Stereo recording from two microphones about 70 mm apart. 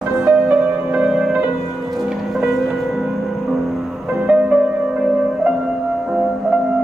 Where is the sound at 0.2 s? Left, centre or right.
Right.